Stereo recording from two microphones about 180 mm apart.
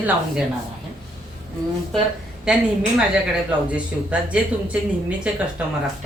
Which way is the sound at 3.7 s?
5° right (ahead or behind).